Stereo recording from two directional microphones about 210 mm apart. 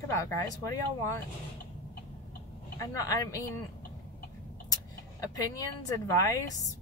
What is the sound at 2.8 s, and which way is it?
Speech, 15° left (ahead or behind).